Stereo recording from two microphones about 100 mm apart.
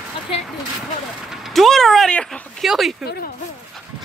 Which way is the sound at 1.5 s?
5° left (ahead or behind).